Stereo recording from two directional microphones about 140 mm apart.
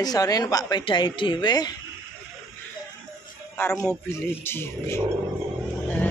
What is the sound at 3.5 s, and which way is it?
Speech, 15° left (ahead or behind).